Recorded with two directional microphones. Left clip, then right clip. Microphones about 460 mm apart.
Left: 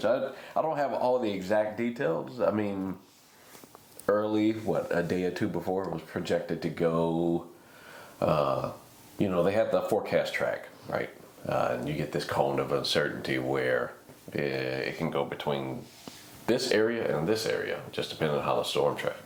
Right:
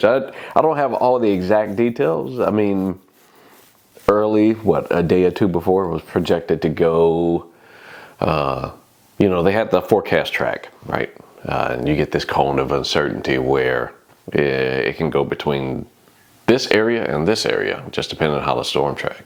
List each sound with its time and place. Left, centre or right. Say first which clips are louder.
0.0 s speech: right 11 dB; right
4.0 s speech: right 11 dB; right
8.2 s speech: right 7 dB; right